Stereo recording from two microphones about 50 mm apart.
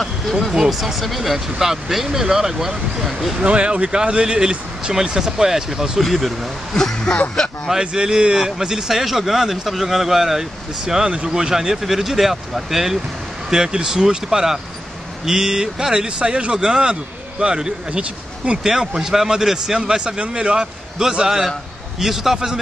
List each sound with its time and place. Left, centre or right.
0.5 s speech: centre
3.4 s speech: right; by 6.8 s centre
6.8 s speech: centre
7.8 s speech: centre